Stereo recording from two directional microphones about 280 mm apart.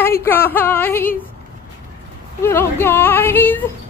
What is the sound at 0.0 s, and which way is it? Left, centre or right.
Speech, centre.